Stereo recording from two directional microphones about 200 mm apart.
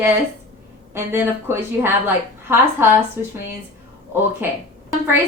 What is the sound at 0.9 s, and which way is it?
Speech, 10° right (ahead or behind).